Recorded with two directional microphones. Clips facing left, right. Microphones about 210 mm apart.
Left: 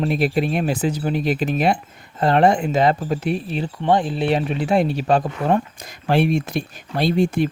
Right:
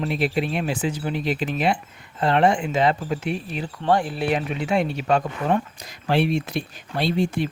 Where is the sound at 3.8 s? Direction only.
20° left (ahead or behind); by 5.6 s 35° left (ahead or behind).